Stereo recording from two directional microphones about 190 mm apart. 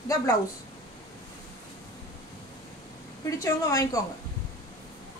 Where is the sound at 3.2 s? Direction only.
15° left (ahead or behind).